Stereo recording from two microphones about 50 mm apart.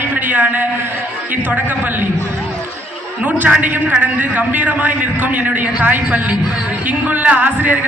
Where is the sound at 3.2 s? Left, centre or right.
Right.